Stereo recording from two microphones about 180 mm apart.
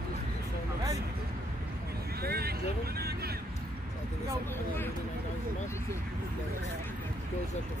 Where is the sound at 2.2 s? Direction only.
60° right (ahead or behind).